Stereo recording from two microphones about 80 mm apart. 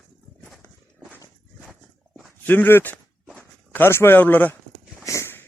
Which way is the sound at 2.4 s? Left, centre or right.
Left.